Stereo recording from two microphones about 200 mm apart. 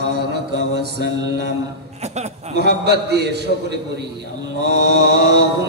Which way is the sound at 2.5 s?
55° right (ahead or behind).